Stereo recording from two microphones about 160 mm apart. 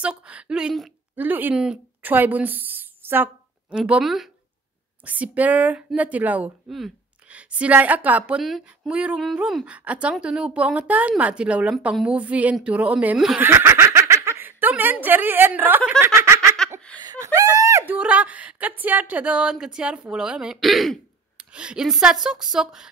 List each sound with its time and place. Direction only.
0.0 s speech: 5° right (ahead or behind)
16.6 s a sound: 5° left (ahead or behind)
17.0 s screaming: 20° right (ahead or behind)
17.9 s speech: 10° right (ahead or behind)